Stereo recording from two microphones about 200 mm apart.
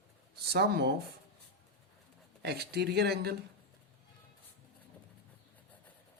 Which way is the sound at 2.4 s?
55° right (ahead or behind).